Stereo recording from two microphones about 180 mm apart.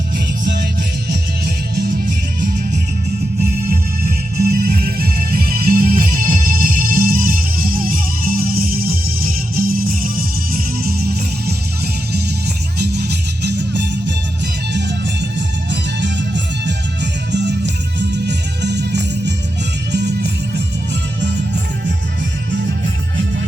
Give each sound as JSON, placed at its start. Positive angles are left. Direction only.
{"t": 1.7, "sound": "music", "side_deg": -60}
{"t": 12.8, "sound": "music", "side_deg": -65}